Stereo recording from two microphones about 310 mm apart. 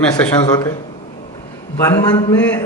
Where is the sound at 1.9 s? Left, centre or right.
Centre.